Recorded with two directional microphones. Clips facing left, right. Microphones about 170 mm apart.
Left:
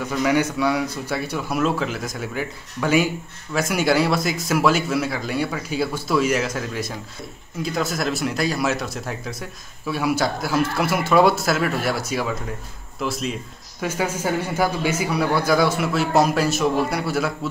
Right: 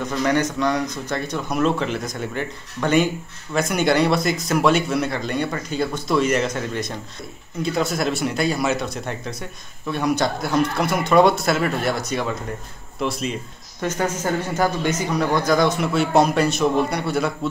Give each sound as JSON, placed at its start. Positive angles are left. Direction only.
{"t": 0.0, "sound": "speech", "side_deg": 5}